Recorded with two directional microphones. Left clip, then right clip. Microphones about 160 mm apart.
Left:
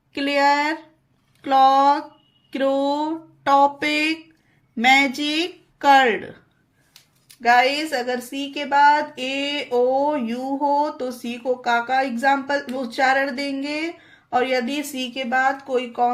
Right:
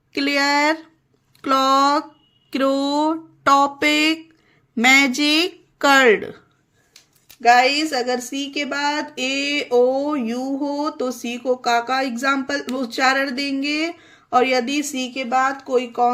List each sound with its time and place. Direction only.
0.1 s a sound: 40° right (ahead or behind)
4.7 s speech: 40° right (ahead or behind)
7.4 s speech: 35° right (ahead or behind)